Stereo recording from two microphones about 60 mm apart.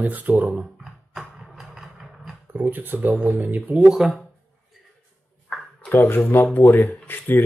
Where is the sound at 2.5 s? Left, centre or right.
Right.